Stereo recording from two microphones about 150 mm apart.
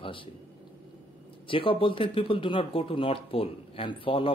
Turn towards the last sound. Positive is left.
turn(degrees=35)  # may be behind; listen again after turning